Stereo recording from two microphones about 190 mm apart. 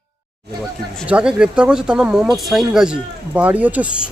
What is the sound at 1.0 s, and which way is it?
Speech, 5° right (ahead or behind).